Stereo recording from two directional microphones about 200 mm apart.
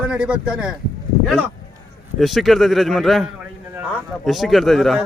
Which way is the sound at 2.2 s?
Centre (ahead or behind).